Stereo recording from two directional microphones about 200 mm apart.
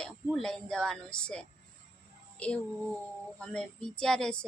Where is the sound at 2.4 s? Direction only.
5° left (ahead or behind).